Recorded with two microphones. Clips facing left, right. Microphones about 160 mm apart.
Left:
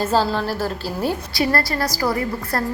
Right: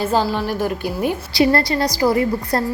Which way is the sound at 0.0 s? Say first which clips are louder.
Right 1 dB; 15° right (ahead or behind).